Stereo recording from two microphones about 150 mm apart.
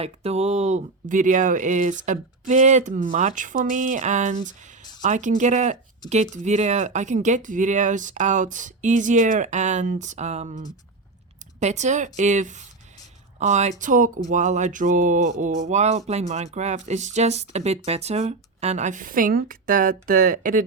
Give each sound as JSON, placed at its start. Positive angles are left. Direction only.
{"t": 0.0, "sound": "speech", "side_deg": -45}
{"t": 11.6, "sound": "speech", "side_deg": -50}